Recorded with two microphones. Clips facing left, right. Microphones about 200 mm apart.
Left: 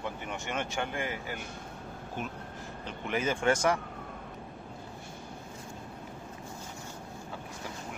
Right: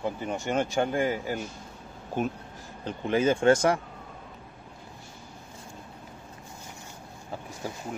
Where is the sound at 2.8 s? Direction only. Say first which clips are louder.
Right 7 dB; 30° right (ahead or behind).